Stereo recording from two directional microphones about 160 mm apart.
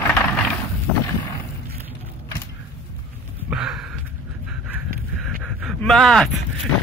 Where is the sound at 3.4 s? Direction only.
5° right (ahead or behind).